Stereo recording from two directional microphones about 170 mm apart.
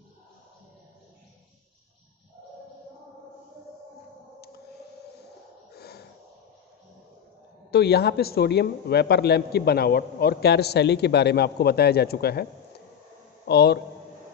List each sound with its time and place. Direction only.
5.8 s gasp: 70° left (ahead or behind)
7.7 s a man's voice: 70° left (ahead or behind)
13.5 s a man's voice: 75° left (ahead or behind)